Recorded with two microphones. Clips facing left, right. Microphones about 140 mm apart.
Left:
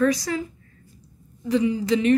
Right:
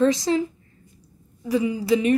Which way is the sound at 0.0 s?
25° right (ahead or behind).